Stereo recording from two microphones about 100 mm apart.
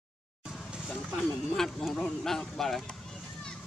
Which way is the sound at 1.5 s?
5° left (ahead or behind).